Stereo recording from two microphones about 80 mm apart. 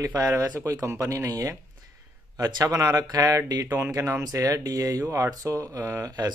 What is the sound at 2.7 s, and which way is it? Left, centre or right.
A man's voice, right.